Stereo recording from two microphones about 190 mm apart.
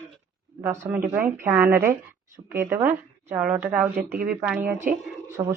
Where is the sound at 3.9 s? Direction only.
55° right (ahead or behind).